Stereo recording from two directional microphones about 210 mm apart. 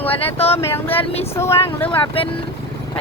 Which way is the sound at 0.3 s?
30° left (ahead or behind).